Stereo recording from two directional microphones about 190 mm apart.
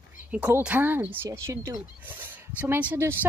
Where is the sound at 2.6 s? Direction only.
10° right (ahead or behind).